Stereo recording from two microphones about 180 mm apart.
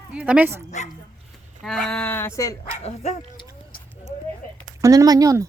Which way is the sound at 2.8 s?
40° left (ahead or behind).